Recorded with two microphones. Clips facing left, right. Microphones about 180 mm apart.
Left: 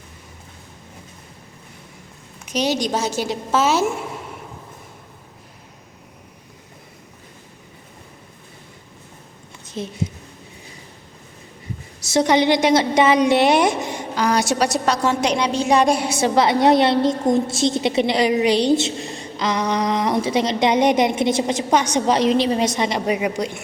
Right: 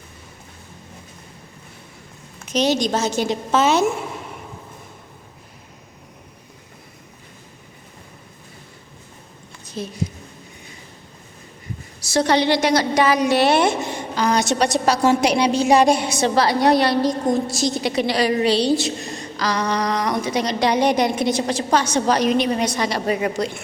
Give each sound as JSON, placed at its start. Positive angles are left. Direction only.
{"t": 2.4, "sound": "a woman's voice", "side_deg": 10}
{"t": 9.6, "sound": "speech", "side_deg": 20}
{"t": 12.0, "sound": "a woman's voice", "side_deg": 20}
{"t": 14.8, "sound": "a woman's voice", "side_deg": -10}
{"t": 16.3, "sound": "a woman's voice", "side_deg": 20}